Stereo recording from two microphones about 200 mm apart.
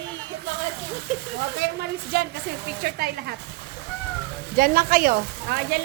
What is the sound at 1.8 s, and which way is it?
A woman's voice, 50° right (ahead or behind).